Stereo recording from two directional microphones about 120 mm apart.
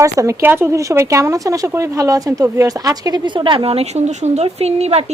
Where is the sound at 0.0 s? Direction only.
25° right (ahead or behind).